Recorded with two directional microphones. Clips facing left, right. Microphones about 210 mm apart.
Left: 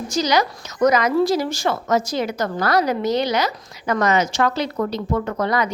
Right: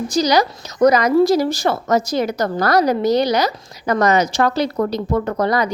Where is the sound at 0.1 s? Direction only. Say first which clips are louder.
Right 3 dB; 35° right (ahead or behind).